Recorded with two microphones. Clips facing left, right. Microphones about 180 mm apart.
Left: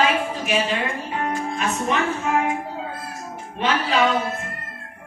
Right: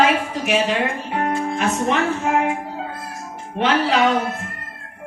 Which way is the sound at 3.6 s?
70° right (ahead or behind).